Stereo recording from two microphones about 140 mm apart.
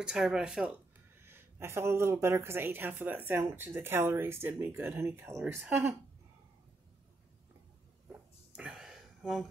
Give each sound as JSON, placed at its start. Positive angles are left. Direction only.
{"t": 0.0, "sound": "speech", "side_deg": -5}
{"t": 1.2, "sound": "a woman's voice", "side_deg": -20}
{"t": 8.1, "sound": "a sound", "side_deg": -5}